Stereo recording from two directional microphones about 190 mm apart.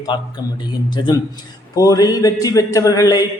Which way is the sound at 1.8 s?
20° left (ahead or behind).